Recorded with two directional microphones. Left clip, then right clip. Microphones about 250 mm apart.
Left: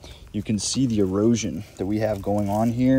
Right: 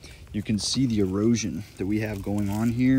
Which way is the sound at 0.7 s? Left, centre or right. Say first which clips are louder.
Left 5 dB; centre.